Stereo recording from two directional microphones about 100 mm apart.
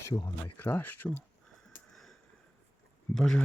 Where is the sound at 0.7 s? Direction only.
20° left (ahead or behind).